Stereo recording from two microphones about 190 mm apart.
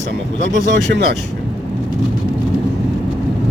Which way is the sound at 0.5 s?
65° right (ahead or behind).